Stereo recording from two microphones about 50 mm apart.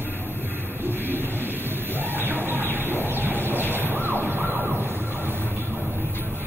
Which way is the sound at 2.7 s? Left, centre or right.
Right.